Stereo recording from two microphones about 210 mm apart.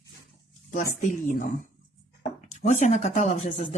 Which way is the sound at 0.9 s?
35° left (ahead or behind).